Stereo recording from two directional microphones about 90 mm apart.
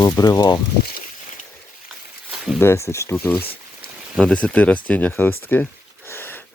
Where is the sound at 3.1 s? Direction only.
20° left (ahead or behind).